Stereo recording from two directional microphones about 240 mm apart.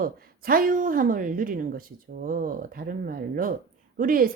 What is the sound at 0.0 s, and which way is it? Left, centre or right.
Speech, right.